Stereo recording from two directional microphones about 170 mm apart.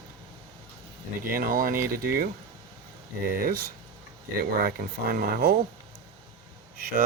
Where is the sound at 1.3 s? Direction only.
55° right (ahead or behind).